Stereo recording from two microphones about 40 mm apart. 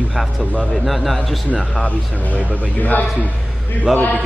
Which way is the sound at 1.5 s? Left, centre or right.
Left.